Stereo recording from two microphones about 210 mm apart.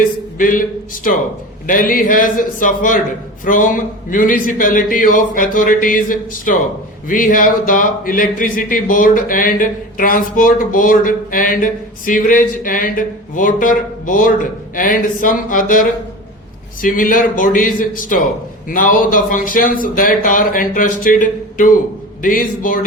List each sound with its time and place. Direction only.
0.3 s a man's voice: 40° left (ahead or behind)
1.6 s speech: 40° left (ahead or behind)